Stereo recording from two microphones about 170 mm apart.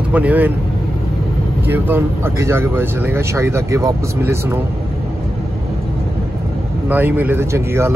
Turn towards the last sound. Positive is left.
turn(degrees=-15)  # may be behind; listen again after turning